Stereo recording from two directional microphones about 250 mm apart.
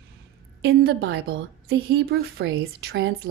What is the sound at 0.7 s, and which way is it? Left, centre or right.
A woman's voice, right.